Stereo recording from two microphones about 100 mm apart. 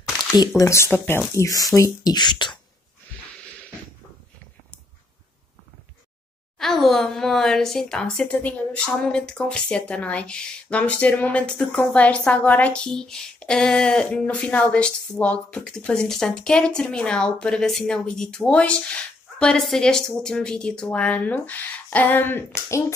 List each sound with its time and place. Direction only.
0.6 s speech: 30° left (ahead or behind)
2.0 s speech: 45° left (ahead or behind)
6.6 s a woman's voice: 5° left (ahead or behind); by 22.9 s 30° left (ahead or behind)